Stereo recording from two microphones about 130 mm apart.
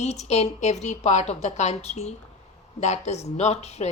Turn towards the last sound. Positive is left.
turn(degrees=55)  # may be behind; listen again after turning